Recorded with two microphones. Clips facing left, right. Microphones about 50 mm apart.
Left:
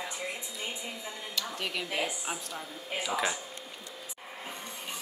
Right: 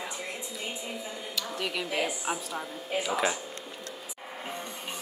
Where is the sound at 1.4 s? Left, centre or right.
Centre.